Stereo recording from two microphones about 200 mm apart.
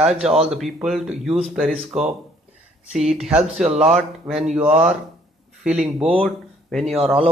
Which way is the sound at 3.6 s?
30° right (ahead or behind).